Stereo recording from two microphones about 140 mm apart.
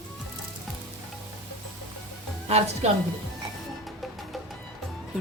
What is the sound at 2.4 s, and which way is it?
Speech, 45° right (ahead or behind).